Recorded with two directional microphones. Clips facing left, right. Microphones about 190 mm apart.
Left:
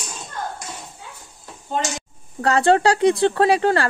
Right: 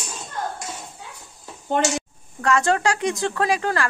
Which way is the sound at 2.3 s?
35° left (ahead or behind).